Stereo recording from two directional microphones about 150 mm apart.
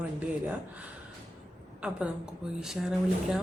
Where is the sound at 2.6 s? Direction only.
5° right (ahead or behind).